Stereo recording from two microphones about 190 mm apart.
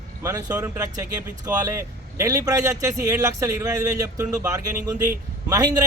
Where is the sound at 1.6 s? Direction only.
15° right (ahead or behind).